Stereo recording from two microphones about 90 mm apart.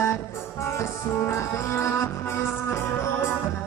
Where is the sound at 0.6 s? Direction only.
30° left (ahead or behind).